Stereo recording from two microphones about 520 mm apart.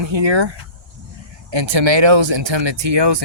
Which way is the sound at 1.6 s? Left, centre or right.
Right.